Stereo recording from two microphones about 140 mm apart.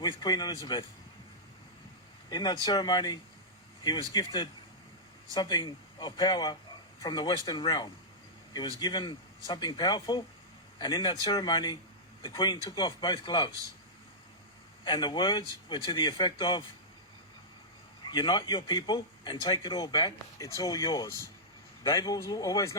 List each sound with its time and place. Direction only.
0.0 s speech: 30° left (ahead or behind)
2.3 s speech: 30° left (ahead or behind)
14.8 s speech: 35° left (ahead or behind)
18.0 s speech: 30° left (ahead or behind)